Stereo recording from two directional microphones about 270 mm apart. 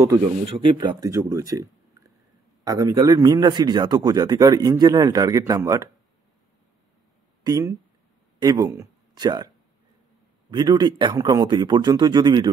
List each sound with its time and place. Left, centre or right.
0.1 s speech: centre
7.4 s speech: centre
10.5 s speech: centre